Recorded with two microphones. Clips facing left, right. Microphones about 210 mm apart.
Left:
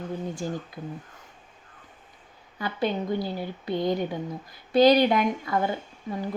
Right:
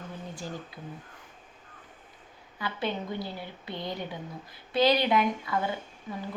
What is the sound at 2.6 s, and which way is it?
A woman's voice, 40° left (ahead or behind).